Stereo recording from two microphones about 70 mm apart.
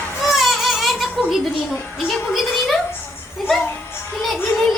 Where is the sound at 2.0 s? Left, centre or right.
Centre.